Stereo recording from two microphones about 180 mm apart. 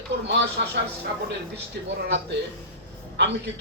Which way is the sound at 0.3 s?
75° right (ahead or behind).